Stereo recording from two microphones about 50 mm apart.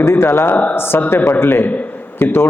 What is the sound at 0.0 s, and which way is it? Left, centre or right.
A man's voice, left.